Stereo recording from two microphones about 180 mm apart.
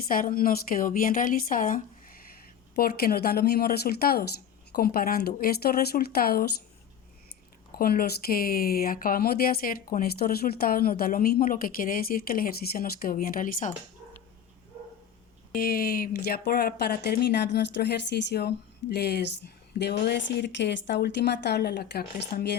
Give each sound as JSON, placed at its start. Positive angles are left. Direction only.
{"t": 0.1, "sound": "speech", "side_deg": 50}
{"t": 7.7, "sound": "speech", "side_deg": 55}
{"t": 15.5, "sound": "speech", "side_deg": 60}